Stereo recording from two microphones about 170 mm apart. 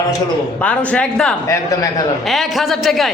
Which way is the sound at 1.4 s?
20° left (ahead or behind).